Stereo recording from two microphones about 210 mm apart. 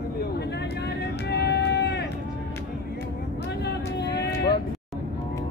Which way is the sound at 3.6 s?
50° left (ahead or behind).